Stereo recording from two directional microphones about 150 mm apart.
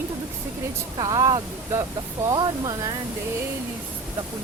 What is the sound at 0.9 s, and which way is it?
Speech, 25° right (ahead or behind).